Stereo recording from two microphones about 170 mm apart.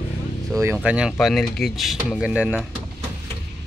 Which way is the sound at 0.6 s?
5° right (ahead or behind).